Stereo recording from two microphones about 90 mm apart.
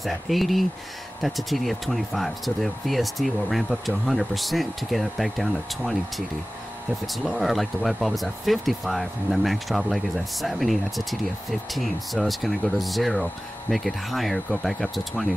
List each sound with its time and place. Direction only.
0.0 s speech: centre (ahead or behind)